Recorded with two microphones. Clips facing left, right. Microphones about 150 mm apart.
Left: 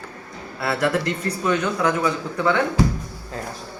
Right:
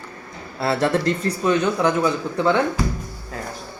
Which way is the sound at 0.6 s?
25° right (ahead or behind).